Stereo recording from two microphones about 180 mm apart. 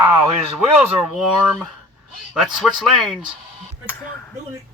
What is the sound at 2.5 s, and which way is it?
Speech, centre (ahead or behind).